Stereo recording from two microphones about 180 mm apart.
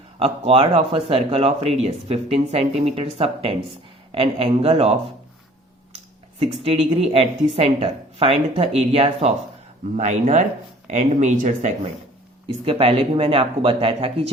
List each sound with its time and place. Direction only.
0.2 s a woman's voice: 30° right (ahead or behind)
6.4 s a woman's voice: 30° right (ahead or behind)
12.6 s a woman's voice: 30° right (ahead or behind)